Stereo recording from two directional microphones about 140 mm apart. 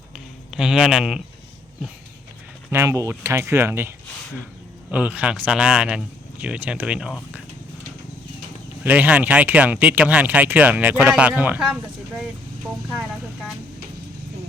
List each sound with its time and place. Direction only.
0.5 s a man's voice: 5° right (ahead or behind)
2.6 s speech: 20° right (ahead or behind)
8.8 s speech: 10° right (ahead or behind)
12.9 s speech: 5° right (ahead or behind)